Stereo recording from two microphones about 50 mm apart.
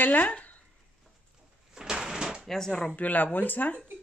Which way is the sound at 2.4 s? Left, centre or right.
Centre.